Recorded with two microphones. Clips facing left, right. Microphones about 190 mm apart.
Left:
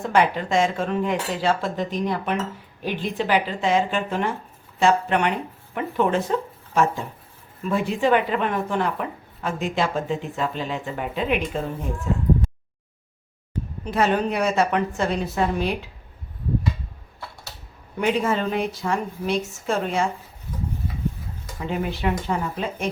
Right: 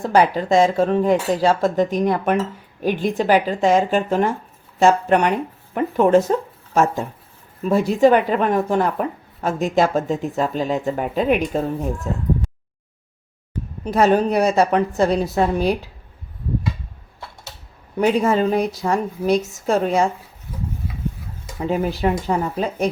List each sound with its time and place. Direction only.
0.0 s speech: 35° right (ahead or behind)
13.8 s speech: 40° right (ahead or behind)
18.0 s speech: 40° right (ahead or behind)
21.7 s speech: 40° right (ahead or behind)